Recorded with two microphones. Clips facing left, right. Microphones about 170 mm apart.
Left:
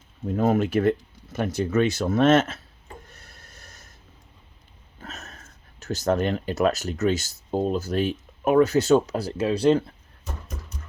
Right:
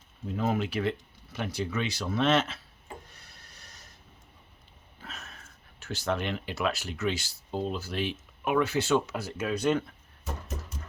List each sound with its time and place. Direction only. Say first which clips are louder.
0.3 s speech: left 7 dB; 50° left (ahead or behind)
3.1 s snort: left 5 dB; 50° left (ahead or behind)
4.9 s sniff: left 5 dB; 45° left (ahead or behind)
5.8 s speech: left 8 dB; 40° left (ahead or behind)